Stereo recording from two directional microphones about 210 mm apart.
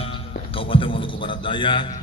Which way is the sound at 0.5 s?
25° left (ahead or behind).